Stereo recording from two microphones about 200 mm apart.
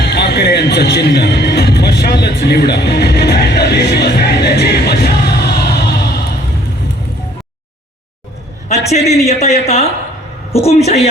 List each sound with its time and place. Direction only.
0.0 s music: 55° left (ahead or behind)
8.9 s speech: 30° left (ahead or behind)